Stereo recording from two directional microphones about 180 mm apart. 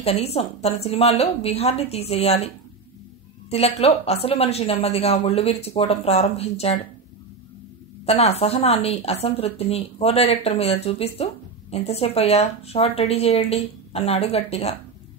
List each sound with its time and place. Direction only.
0.0 s a woman's voice: 35° left (ahead or behind)
8.0 s a woman's voice: 35° left (ahead or behind)